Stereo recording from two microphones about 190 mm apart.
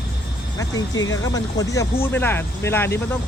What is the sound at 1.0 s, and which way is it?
Speech, 20° left (ahead or behind).